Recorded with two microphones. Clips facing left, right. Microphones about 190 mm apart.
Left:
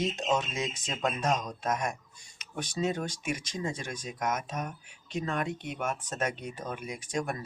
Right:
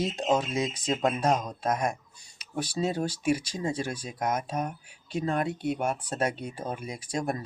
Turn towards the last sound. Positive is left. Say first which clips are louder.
# right 2 dB
turn(degrees=-35)  # may be behind; listen again after turning